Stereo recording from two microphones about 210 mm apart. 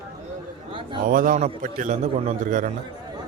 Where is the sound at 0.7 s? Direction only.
25° right (ahead or behind).